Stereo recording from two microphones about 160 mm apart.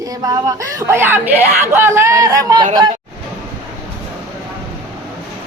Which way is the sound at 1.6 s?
15° right (ahead or behind).